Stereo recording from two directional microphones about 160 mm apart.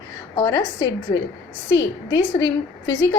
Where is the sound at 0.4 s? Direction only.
15° left (ahead or behind).